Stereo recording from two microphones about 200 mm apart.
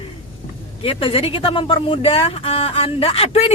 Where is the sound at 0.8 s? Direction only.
30° left (ahead or behind).